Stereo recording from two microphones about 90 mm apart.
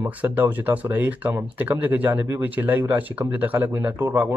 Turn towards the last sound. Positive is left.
turn(degrees=-20)  # may be behind; listen again after turning